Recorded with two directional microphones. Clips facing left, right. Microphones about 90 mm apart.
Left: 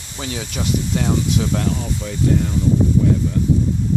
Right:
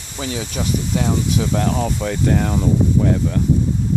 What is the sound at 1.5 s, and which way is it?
Speech, 55° right (ahead or behind).